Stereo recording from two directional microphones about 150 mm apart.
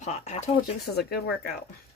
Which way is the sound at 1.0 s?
90° left.